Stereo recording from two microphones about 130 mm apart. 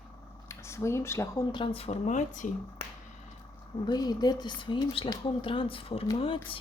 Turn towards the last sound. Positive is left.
turn(degrees=45)  # may be behind; listen again after turning